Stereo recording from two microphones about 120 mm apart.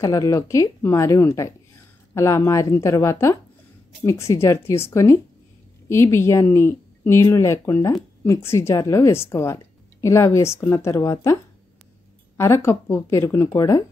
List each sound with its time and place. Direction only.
0.0 s speech: 30° left (ahead or behind)
12.4 s speech: 20° left (ahead or behind)